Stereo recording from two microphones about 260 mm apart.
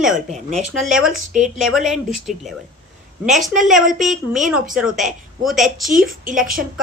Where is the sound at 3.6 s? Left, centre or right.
Centre.